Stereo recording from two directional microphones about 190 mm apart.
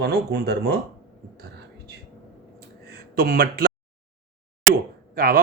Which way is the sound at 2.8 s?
55° right (ahead or behind).